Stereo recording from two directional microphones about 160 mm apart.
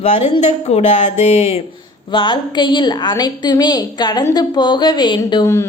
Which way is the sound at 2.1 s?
30° left (ahead or behind).